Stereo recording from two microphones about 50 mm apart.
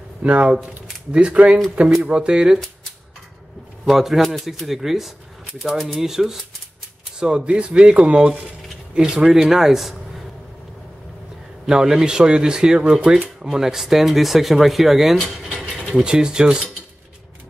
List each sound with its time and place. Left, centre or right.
0.2 s a man's voice: right
3.8 s speech: centre
7.2 s a man's voice: centre
11.6 s a man's voice: centre
15.9 s a man's voice: centre